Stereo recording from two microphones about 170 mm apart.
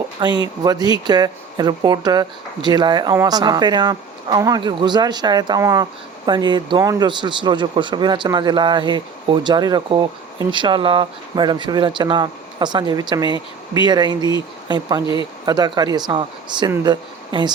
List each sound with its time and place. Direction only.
0.2 s speech: 25° right (ahead or behind)
15.0 s speech: 30° left (ahead or behind)
15.4 s speech: 25° right (ahead or behind)